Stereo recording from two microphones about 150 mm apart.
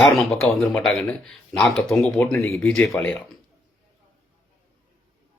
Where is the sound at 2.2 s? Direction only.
20° left (ahead or behind).